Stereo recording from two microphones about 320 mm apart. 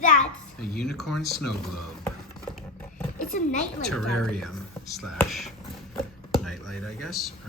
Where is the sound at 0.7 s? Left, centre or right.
Centre.